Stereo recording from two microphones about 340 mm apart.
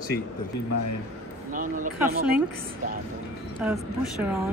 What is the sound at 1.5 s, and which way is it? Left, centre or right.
Speech, right.